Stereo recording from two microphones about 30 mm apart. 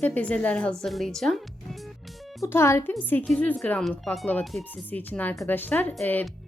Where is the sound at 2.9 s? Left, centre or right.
Left.